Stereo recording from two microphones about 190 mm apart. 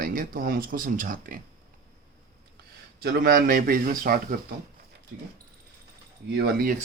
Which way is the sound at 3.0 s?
55° right (ahead or behind).